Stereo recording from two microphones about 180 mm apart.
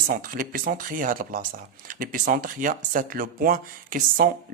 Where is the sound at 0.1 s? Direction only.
50° right (ahead or behind).